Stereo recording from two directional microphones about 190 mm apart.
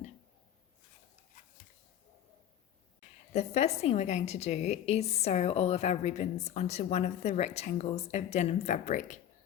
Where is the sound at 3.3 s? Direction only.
35° left (ahead or behind).